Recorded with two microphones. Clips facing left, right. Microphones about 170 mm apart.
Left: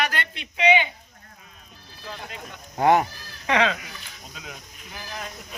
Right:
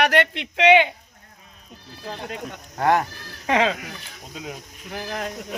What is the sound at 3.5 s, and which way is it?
Speech, 35° right (ahead or behind).